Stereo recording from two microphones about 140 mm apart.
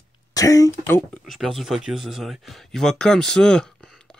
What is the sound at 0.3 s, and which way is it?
Speech, 25° left (ahead or behind).